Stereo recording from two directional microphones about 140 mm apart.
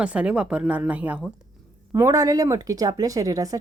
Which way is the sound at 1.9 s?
25° right (ahead or behind).